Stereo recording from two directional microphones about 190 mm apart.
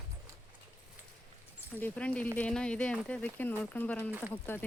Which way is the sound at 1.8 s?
10° left (ahead or behind).